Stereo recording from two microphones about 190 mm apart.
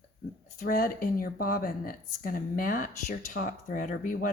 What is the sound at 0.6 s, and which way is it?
Speech, 50° left (ahead or behind).